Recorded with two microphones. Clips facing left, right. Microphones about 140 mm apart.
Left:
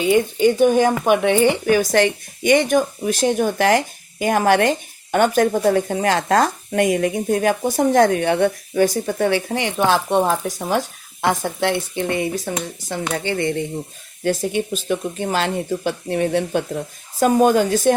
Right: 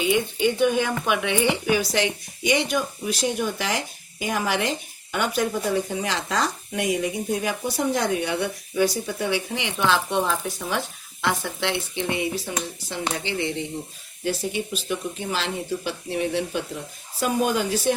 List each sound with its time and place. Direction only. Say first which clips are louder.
0.0 s speech: left 6 dB; 40° left (ahead or behind)